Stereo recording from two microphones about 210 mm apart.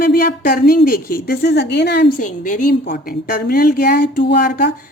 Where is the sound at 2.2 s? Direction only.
35° left (ahead or behind).